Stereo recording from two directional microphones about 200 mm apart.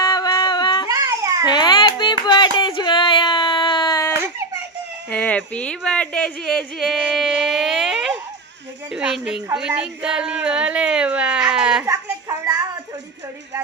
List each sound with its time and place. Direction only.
0.0 s yodeling: 20° left (ahead or behind)
0.9 s babbling: 15° right (ahead or behind)
1.5 s a sound: 20° left (ahead or behind)
5.1 s a woman's voice: 5° left (ahead or behind); by 12.6 s 15° right (ahead or behind)